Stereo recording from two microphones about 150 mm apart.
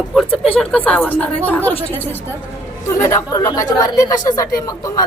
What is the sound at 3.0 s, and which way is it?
Speech, 20° left (ahead or behind).